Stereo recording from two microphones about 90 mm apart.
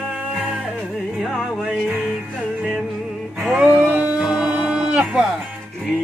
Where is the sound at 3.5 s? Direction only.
15° right (ahead or behind).